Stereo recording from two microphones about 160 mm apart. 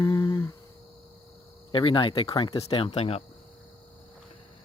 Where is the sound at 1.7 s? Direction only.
30° left (ahead or behind).